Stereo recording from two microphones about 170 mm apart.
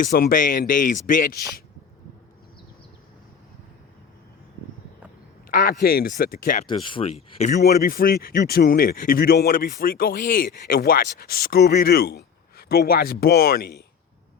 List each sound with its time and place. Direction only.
0.0 s speech: 60° left (ahead or behind)
5.5 s speech: 60° left (ahead or behind)
6.7 s speech: 30° left (ahead or behind)
7.5 s speech: 65° left (ahead or behind)